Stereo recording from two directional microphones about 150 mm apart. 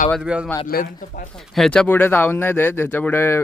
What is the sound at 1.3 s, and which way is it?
Speech, centre (ahead or behind).